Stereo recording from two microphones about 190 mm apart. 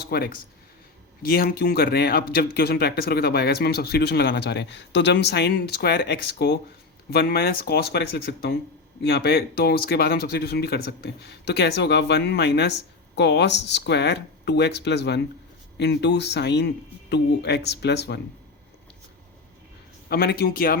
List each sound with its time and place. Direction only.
0.1 s speech: 55° left (ahead or behind)
20.1 s speech: 55° left (ahead or behind)